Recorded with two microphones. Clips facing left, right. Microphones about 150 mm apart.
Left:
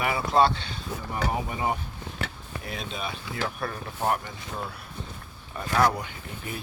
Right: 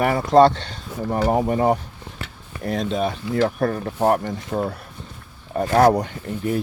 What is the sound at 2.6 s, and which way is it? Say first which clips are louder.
Speech: right 13 dB; 90° right.